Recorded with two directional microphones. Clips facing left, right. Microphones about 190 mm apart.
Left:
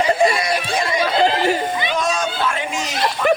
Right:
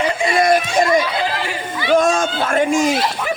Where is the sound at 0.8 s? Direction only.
50° right (ahead or behind).